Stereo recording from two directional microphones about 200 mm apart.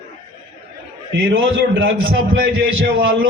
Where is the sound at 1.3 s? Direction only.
75° right (ahead or behind).